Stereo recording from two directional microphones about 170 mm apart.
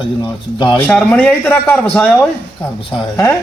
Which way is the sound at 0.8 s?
5° left (ahead or behind).